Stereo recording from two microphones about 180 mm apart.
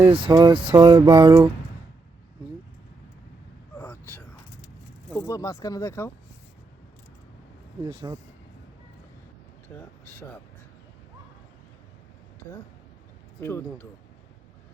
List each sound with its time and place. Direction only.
0.1 s speech: 30° right (ahead or behind)
3.8 s a sound: 10° left (ahead or behind)
5.1 s speech: 15° left (ahead or behind)
7.9 s speech: 20° right (ahead or behind)
9.6 s speech: 10° left (ahead or behind)
13.4 s speech: 10° left (ahead or behind)